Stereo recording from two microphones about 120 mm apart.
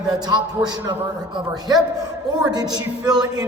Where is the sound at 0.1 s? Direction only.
35° right (ahead or behind).